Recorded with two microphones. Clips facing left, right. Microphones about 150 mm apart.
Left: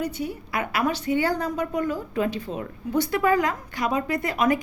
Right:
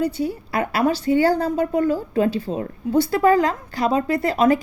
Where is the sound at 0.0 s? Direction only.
30° right (ahead or behind).